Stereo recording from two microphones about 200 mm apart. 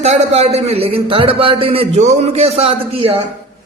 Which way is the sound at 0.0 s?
30° right (ahead or behind).